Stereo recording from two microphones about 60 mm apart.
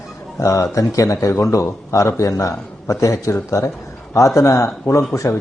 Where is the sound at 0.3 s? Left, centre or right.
Left.